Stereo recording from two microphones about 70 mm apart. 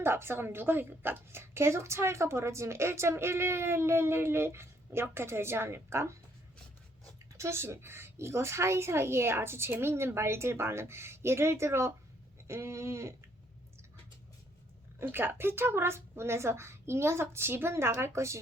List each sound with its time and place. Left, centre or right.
0.0 s a woman's voice: right
7.3 s a woman's voice: right
15.0 s a woman's voice: right